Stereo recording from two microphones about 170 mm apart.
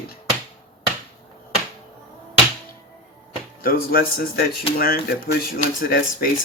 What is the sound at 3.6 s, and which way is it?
Speech, 60° left (ahead or behind).